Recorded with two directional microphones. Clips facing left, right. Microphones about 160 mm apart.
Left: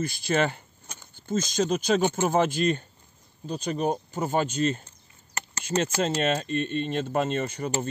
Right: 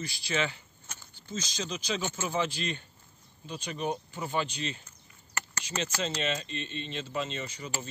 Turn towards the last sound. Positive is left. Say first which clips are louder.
# left 9 dB
turn(degrees=55)  # may be behind; listen again after turning